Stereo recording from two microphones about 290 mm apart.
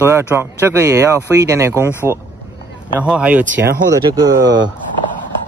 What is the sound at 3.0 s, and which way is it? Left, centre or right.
Speech, centre.